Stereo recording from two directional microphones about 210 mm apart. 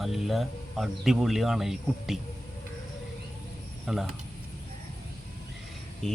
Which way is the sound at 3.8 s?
Centre (ahead or behind).